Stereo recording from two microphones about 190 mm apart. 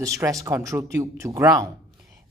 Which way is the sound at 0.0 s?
15° right (ahead or behind).